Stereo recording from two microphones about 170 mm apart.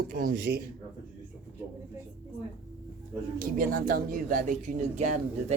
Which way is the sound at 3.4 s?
55° right (ahead or behind).